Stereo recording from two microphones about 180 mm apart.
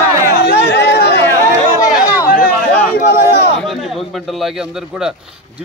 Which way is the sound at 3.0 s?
60° left (ahead or behind).